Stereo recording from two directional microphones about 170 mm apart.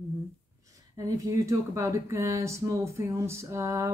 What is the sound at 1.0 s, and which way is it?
Speech, 20° right (ahead or behind).